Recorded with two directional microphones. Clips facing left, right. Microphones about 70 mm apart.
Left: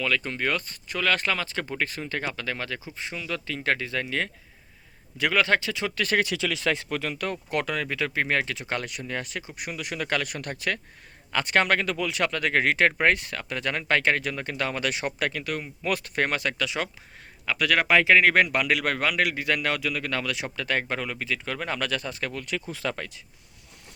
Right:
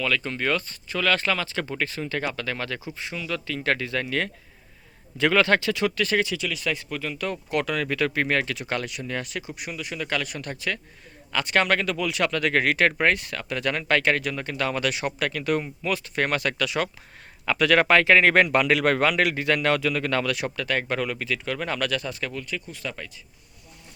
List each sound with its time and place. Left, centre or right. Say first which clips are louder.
0.0 s speech: right 1 dB; centre
5.9 s speech: right 1 dB; left
6.3 s speech: left 2 dB; left
6.9 s speech: even; left
7.9 s speech: right 3 dB; centre
9.8 s speech: left 1 dB; left
11.3 s speech: even; left
15.4 s a man's voice: right 7 dB; centre
15.9 s speech: even; left
16.3 s speech: right 3 dB; centre
17.4 s a man's voice: right 4 dB; centre
20.2 s speech: right 3 dB; centre; by 22.4 s left
22.4 s speech: left 3 dB; left